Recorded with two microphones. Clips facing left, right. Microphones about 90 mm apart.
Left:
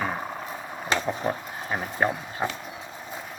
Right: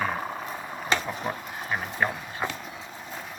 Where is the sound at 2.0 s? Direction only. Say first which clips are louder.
Left 3 dB; 20° left (ahead or behind).